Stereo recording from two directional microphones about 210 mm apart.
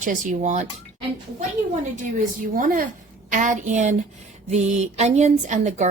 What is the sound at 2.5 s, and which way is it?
Speech, 40° right (ahead or behind).